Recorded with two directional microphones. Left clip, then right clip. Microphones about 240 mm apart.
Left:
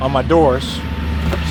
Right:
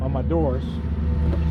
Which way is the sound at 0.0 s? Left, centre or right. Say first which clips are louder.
Left 12 dB; left.